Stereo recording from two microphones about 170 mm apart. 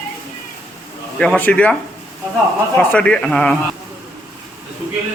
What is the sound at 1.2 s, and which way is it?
Speech, 5° left (ahead or behind).